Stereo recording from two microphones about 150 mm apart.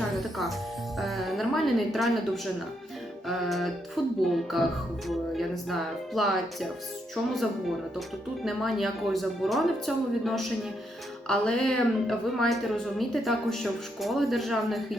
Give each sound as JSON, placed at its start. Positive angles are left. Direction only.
{"t": 0.2, "sound": "music", "side_deg": 0}
{"t": 0.9, "sound": "a woman's voice", "side_deg": 0}
{"t": 8.4, "sound": "a woman's voice", "side_deg": 0}